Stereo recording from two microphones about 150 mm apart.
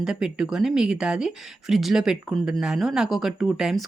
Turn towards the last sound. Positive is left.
turn(degrees=-5)  # may be behind; listen again after turning